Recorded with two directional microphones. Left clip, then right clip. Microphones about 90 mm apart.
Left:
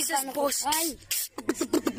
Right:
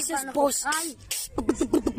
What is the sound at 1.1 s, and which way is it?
Beatboxing, 35° right (ahead or behind).